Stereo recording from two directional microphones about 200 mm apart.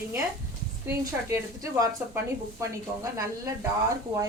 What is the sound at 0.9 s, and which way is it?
Speech, 15° right (ahead or behind).